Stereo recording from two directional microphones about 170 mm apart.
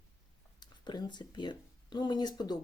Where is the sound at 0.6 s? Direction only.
25° left (ahead or behind).